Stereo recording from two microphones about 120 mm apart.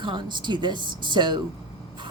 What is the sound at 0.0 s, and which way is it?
Speech, 40° right (ahead or behind).